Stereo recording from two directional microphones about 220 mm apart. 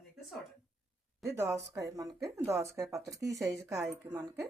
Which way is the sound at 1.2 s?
15° right (ahead or behind).